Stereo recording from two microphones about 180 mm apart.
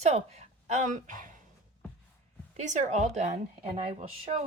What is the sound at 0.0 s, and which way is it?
A woman's voice, 40° right (ahead or behind).